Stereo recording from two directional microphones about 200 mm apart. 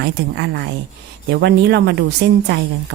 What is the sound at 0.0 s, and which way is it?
A woman's voice, 55° right (ahead or behind).